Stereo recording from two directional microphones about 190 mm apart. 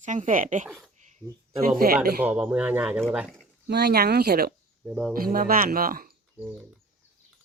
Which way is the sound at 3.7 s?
55° right (ahead or behind).